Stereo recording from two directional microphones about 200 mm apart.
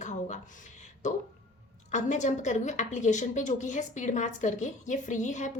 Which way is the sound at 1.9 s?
35° left (ahead or behind).